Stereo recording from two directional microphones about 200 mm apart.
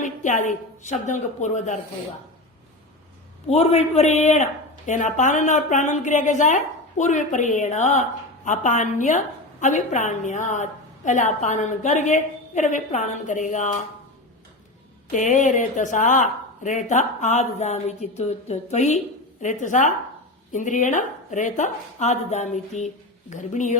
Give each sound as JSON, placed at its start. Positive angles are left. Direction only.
{"t": 0.0, "sound": "a woman's voice", "side_deg": 40}
{"t": 3.4, "sound": "a woman's voice", "side_deg": 30}
{"t": 15.1, "sound": "a woman's voice", "side_deg": 40}